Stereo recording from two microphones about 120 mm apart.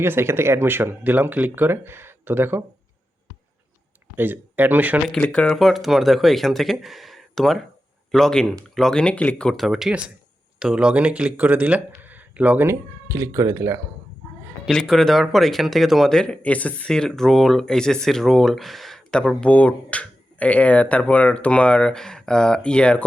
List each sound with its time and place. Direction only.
0.0 s speech: 20° right (ahead or behind)
4.2 s speech: 15° right (ahead or behind)
5.0 s speech: 10° left (ahead or behind); by 12.7 s 15° right (ahead or behind)
13.1 s speech: 25° right (ahead or behind)
14.7 s speech: 5° left (ahead or behind)